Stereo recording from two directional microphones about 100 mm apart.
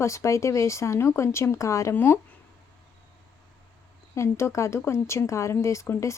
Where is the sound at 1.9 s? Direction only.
20° left (ahead or behind).